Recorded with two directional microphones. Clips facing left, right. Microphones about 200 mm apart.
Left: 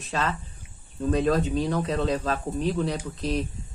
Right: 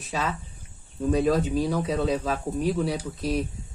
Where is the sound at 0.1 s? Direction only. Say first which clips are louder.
Left 1 dB; 5° right (ahead or behind).